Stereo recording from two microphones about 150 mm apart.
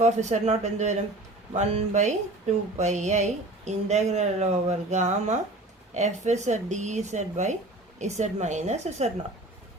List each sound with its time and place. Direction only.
0.0 s a woman's voice: 50° right (ahead or behind)